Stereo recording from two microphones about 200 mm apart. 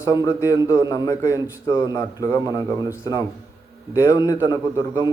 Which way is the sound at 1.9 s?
15° left (ahead or behind).